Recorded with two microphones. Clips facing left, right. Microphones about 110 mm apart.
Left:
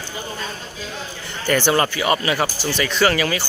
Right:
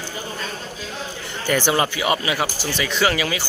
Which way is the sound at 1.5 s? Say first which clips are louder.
Left 2 dB; 10° right (ahead or behind).